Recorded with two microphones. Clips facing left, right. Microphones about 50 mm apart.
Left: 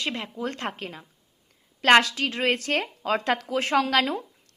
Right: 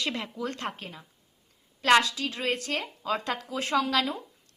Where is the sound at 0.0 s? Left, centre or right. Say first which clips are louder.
Left 2 dB; left.